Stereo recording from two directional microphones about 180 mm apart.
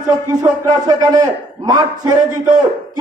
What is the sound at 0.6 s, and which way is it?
A man's voice, 20° right (ahead or behind).